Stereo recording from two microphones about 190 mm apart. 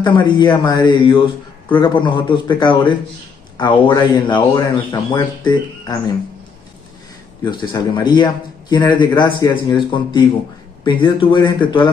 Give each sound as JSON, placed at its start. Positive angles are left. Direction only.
{"t": 0.0, "sound": "speech", "side_deg": 25}
{"t": 7.5, "sound": "speech", "side_deg": 25}